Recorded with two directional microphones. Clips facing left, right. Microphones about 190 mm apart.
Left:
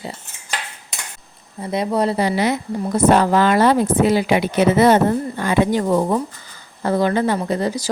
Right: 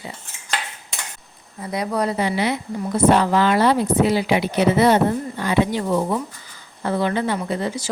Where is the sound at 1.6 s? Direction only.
25° left (ahead or behind).